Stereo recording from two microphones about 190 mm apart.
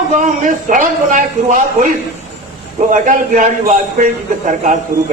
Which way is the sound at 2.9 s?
40° right (ahead or behind).